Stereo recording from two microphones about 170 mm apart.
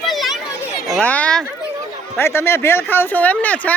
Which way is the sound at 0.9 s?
10° left (ahead or behind).